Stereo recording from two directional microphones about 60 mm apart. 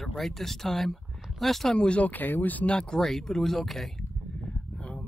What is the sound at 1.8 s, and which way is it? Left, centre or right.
Speech, centre.